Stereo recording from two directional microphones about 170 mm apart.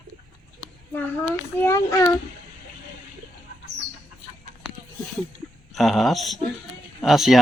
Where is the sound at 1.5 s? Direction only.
15° left (ahead or behind).